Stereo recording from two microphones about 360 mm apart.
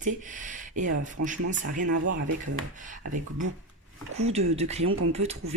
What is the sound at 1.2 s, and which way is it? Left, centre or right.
Speech, right.